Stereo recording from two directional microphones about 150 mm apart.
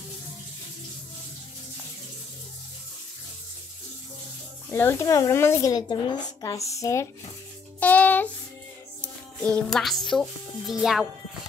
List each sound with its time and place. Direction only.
4.6 s speech: 15° left (ahead or behind)
7.8 s music: 10° left (ahead or behind)
9.0 s a child's voice: 5° left (ahead or behind)